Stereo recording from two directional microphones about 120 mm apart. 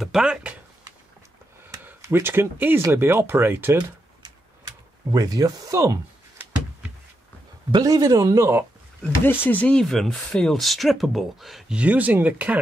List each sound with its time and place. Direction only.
0.0 s speech: 5° right (ahead or behind)
1.6 s speech: 20° right (ahead or behind)
5.1 s speech: 30° right (ahead or behind)
7.7 s speech: 30° right (ahead or behind)
9.0 s speech: 15° left (ahead or behind); by 11.8 s centre (ahead or behind)
11.8 s speech: 15° right (ahead or behind)